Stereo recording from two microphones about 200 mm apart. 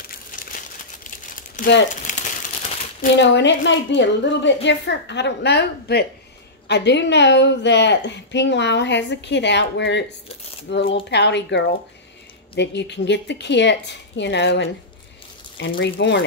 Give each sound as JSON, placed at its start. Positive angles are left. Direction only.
{"t": 1.1, "sound": "crumpling", "side_deg": 40}
{"t": 3.2, "sound": "a woman's voice", "side_deg": 60}
{"t": 15.7, "sound": "a woman's voice", "side_deg": 60}